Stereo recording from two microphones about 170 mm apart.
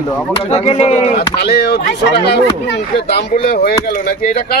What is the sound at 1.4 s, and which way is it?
Speech, 75° left (ahead or behind).